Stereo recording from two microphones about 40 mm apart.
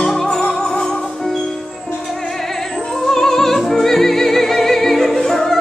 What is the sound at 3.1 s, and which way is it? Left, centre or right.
Music, centre.